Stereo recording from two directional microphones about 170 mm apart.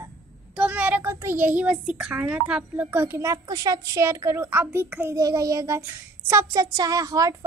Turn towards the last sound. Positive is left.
turn(degrees=-20)  # may be behind; listen again after turning